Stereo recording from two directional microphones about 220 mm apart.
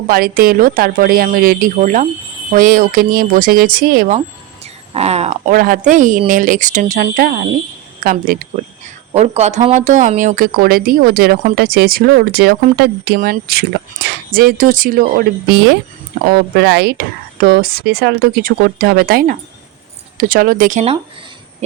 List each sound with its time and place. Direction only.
0.1 s speech: 45° right (ahead or behind)
4.6 s speech: 30° right (ahead or behind)